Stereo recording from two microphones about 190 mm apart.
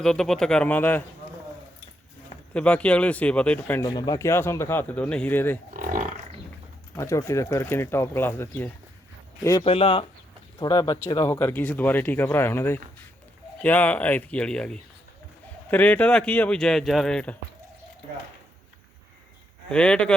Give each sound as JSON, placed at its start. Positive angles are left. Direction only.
{"t": 0.0, "sound": "speech", "side_deg": 5}
{"t": 2.5, "sound": "speech", "side_deg": 5}
{"t": 3.8, "sound": "speech", "side_deg": 20}
{"t": 5.7, "sound": "livestock", "side_deg": -45}
{"t": 6.9, "sound": "speech", "side_deg": 15}
{"t": 9.6, "sound": "speech", "side_deg": 30}
{"t": 19.7, "sound": "speech", "side_deg": 5}